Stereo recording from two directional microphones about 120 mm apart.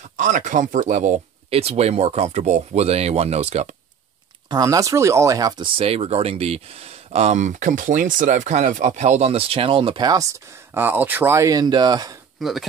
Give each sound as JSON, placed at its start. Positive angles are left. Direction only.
{"t": 0.2, "sound": "speech", "side_deg": -90}
{"t": 1.5, "sound": "speech", "side_deg": -60}
{"t": 4.5, "sound": "speech", "side_deg": -30}
{"t": 5.6, "sound": "speech", "side_deg": -50}
{"t": 10.7, "sound": "speech", "side_deg": -15}
{"t": 12.4, "sound": "speech", "side_deg": 0}